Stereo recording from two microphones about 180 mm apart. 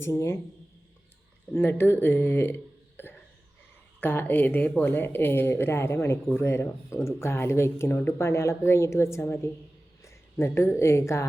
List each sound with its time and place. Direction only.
0.0 s a woman's voice: 15° left (ahead or behind)
1.5 s a woman's voice: 15° left (ahead or behind)
3.0 s a sound: 10° left (ahead or behind)
4.0 s a woman's voice: 10° left (ahead or behind)